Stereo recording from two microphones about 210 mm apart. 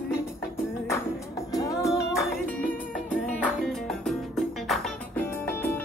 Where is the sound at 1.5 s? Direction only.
15° left (ahead or behind).